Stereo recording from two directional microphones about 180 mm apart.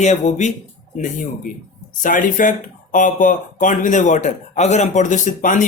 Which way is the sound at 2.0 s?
45° left (ahead or behind).